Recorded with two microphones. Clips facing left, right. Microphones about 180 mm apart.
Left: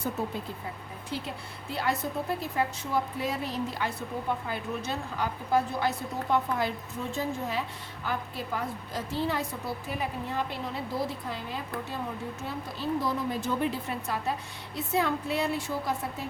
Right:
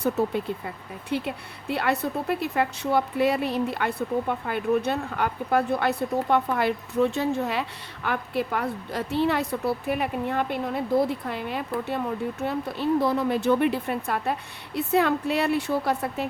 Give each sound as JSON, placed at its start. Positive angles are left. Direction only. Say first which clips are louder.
{"t": 1.1, "sound": "a woman's voice", "louder": "right 8 dB", "side_deg": -65}